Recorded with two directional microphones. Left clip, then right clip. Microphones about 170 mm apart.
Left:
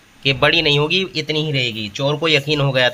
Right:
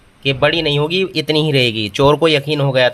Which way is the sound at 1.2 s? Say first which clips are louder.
Right 5 dB; 25° right (ahead or behind).